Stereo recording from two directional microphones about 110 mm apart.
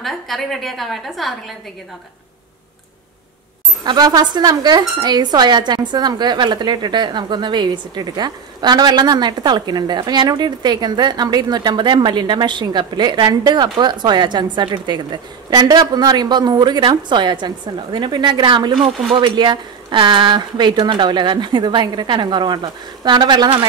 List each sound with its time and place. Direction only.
0.0 s a woman's voice: centre (ahead or behind)
3.8 s speech: 40° right (ahead or behind)